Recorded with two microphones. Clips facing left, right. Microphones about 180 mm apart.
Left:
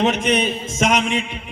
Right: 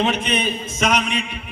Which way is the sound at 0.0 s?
20° left (ahead or behind).